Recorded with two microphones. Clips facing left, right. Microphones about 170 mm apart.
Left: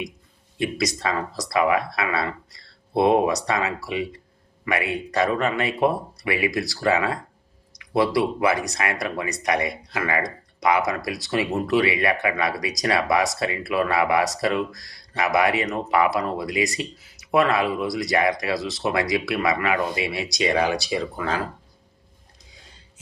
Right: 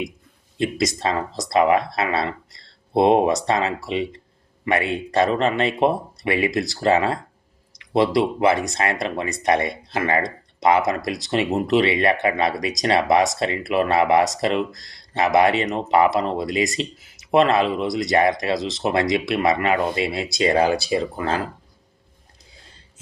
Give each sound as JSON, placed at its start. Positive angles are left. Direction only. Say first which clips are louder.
{"t": 0.9, "sound": "speech", "louder": "right 3 dB", "side_deg": -25}